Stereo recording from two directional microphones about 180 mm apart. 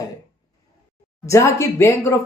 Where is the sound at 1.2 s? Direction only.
15° left (ahead or behind).